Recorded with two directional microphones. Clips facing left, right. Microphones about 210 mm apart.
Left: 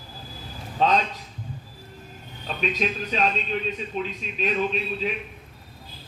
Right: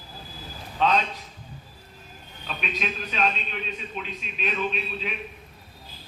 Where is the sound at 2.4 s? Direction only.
35° left (ahead or behind).